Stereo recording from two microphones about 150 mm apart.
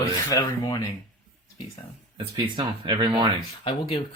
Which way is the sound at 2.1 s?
35° right (ahead or behind).